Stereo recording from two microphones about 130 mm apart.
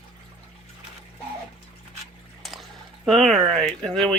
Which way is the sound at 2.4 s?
Centre (ahead or behind).